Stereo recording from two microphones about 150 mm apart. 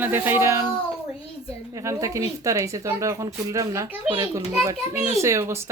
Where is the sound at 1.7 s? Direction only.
20° right (ahead or behind).